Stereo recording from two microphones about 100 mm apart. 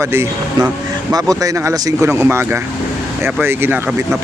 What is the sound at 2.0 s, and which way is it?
Speech, 25° right (ahead or behind).